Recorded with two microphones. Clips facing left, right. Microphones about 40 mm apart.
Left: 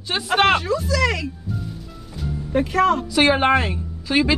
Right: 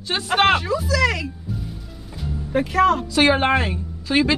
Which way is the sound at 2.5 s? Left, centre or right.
Centre.